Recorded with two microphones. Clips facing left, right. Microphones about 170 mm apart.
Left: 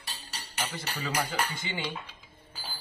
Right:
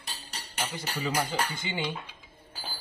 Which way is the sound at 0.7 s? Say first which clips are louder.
Right 5 dB; 15° right (ahead or behind).